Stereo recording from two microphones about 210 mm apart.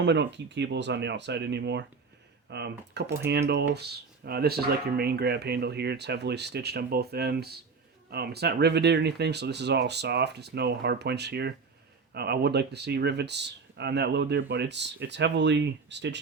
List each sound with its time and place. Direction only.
0.0 s speech: 55° right (ahead or behind)